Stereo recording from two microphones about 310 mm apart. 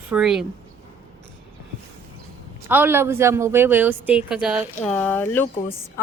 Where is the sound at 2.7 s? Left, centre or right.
Centre.